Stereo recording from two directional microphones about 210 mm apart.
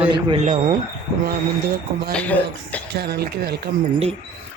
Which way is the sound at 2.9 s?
50° right (ahead or behind).